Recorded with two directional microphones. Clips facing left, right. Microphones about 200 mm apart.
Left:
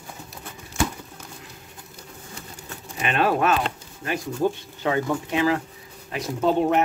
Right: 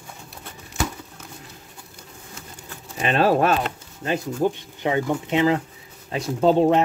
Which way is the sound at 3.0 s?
30° right (ahead or behind).